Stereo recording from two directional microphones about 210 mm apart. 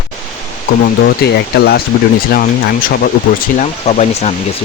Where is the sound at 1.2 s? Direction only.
50° left (ahead or behind).